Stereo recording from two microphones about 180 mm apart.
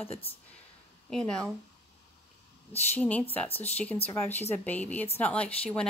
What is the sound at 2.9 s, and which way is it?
Speech, 10° left (ahead or behind).